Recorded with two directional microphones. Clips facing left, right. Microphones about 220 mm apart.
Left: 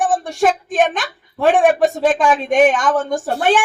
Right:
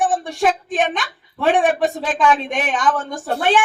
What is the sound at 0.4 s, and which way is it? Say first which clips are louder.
A woman's voice: left 3 dB; 45° left (ahead or behind).